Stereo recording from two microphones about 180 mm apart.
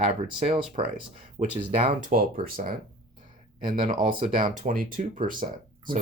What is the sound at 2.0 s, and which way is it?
Speech, 50° right (ahead or behind).